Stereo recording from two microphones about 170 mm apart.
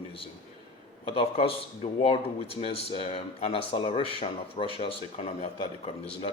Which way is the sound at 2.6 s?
35° left (ahead or behind).